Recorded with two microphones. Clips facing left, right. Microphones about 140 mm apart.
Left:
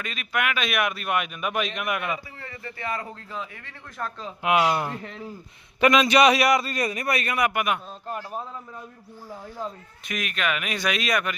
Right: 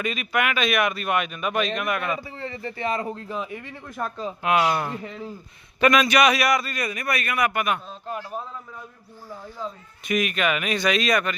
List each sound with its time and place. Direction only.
0.0 s speech: 5° right (ahead or behind); by 2.2 s 15° left (ahead or behind)
2.4 s speech: 25° right (ahead or behind)
4.4 s a man's voice: 15° left (ahead or behind)
10.1 s speech: 5° right (ahead or behind)